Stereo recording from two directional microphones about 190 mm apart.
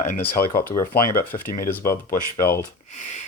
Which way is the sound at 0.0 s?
45° left (ahead or behind).